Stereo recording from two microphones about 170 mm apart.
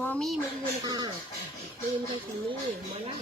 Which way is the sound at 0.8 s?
25° right (ahead or behind).